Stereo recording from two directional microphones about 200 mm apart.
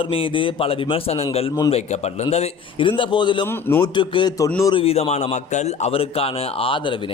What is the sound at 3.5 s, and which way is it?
A man's voice, 10° left (ahead or behind).